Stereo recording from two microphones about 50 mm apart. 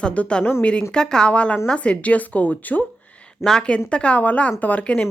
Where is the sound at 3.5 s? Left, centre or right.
Centre.